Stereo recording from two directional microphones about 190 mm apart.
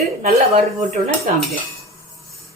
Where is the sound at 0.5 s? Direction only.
35° right (ahead or behind).